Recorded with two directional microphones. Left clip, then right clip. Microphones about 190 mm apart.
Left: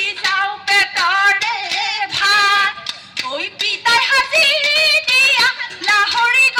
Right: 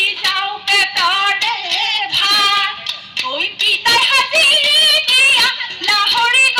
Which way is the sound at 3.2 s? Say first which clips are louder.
Right 4 dB; 30° right (ahead or behind).